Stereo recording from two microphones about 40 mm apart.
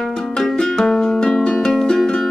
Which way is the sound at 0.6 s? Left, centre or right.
Centre.